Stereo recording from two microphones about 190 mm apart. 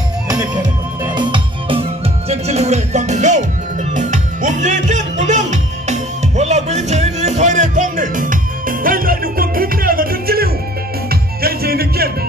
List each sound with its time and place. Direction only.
1.0 s music: 25° right (ahead or behind); by 12.1 s 55° right (ahead or behind)